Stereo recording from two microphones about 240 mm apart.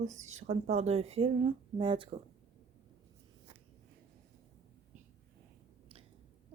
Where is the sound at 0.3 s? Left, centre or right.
Right.